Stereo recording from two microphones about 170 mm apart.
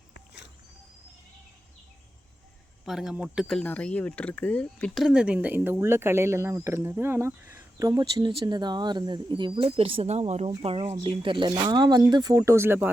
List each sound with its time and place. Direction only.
2.8 s speech: centre (ahead or behind)